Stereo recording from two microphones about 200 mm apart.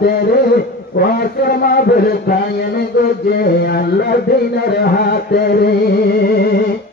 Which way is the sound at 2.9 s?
55° left (ahead or behind).